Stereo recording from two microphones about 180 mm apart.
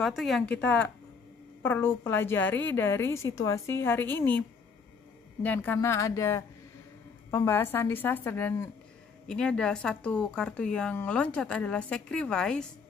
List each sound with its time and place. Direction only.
0.0 s a woman's voice: centre (ahead or behind)